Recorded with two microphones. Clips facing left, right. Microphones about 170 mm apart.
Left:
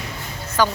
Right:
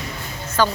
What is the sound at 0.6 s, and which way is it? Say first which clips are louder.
Speech: even; 15° left (ahead or behind).